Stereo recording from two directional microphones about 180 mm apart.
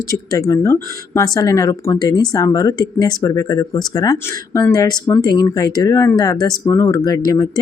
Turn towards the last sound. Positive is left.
turn(degrees=20)  # may be behind; listen again after turning